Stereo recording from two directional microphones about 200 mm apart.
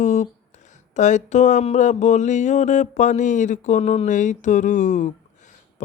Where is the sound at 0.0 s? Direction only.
35° left (ahead or behind).